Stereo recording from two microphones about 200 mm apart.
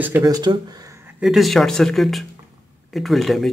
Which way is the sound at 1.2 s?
Centre (ahead or behind).